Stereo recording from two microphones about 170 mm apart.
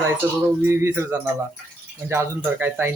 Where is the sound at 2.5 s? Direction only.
10° right (ahead or behind).